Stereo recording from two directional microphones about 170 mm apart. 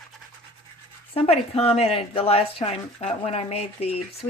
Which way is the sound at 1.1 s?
35° left (ahead or behind).